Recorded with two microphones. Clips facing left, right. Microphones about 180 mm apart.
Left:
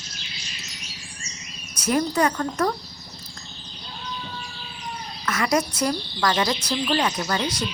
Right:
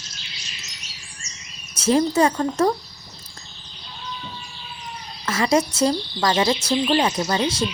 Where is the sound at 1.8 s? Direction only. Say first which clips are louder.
Right 4 dB; 25° right (ahead or behind).